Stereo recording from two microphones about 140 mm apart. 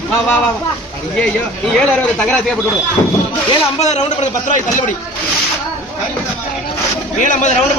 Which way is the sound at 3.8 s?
55° left (ahead or behind).